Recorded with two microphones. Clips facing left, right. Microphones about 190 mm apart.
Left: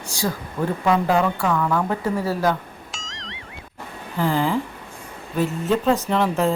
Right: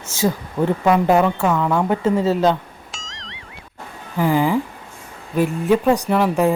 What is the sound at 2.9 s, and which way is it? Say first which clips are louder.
Clang: even; centre (ahead or behind).